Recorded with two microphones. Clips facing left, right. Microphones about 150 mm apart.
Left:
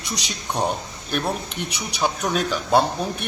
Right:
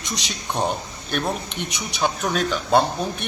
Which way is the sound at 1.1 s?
5° left (ahead or behind).